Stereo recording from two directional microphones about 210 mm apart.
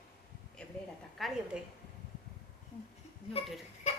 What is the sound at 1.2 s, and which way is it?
Speech, 5° right (ahead or behind).